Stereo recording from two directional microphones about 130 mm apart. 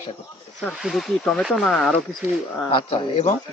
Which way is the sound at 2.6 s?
40° left (ahead or behind).